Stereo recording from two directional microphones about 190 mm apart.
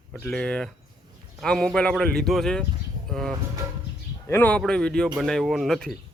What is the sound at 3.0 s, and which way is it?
Music, centre (ahead or behind).